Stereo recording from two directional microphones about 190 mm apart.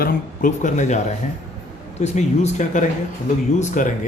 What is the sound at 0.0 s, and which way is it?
Speech, 45° left (ahead or behind).